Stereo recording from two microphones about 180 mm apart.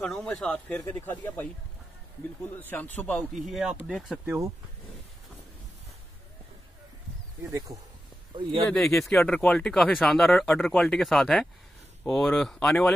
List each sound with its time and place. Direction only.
0.0 s a man's voice: 5° left (ahead or behind)
2.6 s a man's voice: 10° left (ahead or behind)
7.5 s speech: 20° right (ahead or behind)
8.6 s speech: 5° left (ahead or behind)